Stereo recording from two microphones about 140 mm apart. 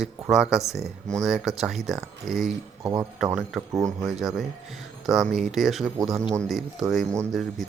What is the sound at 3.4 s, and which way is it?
Speech, centre (ahead or behind).